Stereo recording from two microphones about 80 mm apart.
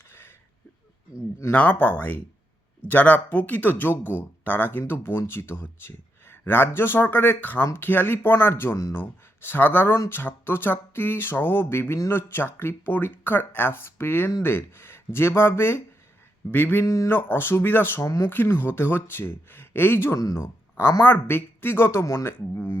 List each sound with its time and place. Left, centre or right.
0.1 s a sound: left
1.5 s speech: left
16.8 s speech: left